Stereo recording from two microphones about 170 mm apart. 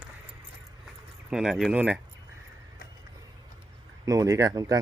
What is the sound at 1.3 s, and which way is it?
Speech, 5° right (ahead or behind).